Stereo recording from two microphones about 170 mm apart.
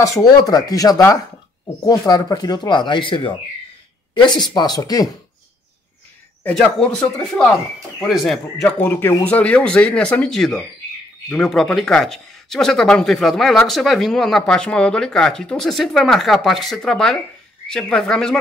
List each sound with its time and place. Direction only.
0.0 s speech: 20° left (ahead or behind)
6.4 s speech: 5° left (ahead or behind)
8.0 s speech: centre (ahead or behind)